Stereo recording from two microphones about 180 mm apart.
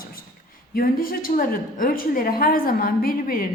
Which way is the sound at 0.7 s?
55° left (ahead or behind).